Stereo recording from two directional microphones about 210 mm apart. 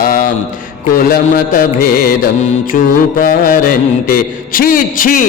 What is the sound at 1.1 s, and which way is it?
Music, 45° left (ahead or behind).